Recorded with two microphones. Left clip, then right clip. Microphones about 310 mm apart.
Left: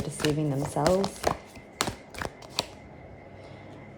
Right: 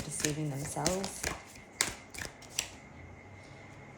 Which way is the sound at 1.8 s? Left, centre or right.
Centre.